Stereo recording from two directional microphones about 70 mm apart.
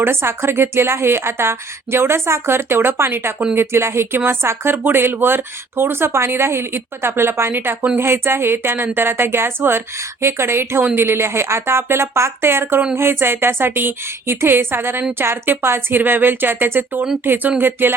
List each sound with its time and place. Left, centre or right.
0.0 s speech: right